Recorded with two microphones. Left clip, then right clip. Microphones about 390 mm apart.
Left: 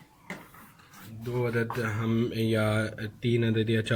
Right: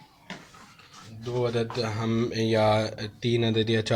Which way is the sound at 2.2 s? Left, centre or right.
Centre.